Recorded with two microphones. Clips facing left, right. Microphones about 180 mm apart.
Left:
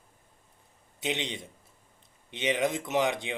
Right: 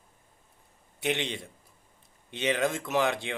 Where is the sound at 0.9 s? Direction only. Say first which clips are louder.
Right 2 dB; 20° left (ahead or behind).